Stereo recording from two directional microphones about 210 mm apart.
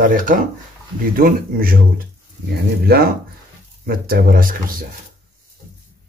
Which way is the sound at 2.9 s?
45° right (ahead or behind).